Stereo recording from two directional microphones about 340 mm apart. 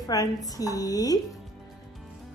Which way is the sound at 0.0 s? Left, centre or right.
Centre.